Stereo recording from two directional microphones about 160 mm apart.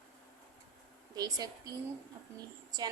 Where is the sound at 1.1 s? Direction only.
25° right (ahead or behind).